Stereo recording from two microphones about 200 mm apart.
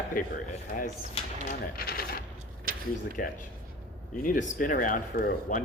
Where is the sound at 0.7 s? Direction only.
40° left (ahead or behind).